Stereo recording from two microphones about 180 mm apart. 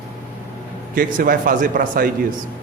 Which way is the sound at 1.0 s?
50° right (ahead or behind).